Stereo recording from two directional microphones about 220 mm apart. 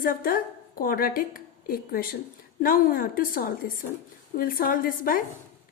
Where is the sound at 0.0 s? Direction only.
40° left (ahead or behind).